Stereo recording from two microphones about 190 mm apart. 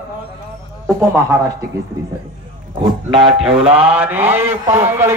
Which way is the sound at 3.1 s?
30° right (ahead or behind).